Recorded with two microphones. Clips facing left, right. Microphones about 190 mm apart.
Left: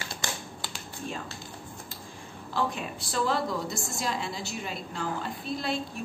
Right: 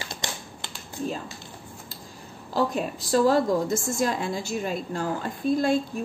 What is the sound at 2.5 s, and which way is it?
A woman's voice, 40° right (ahead or behind).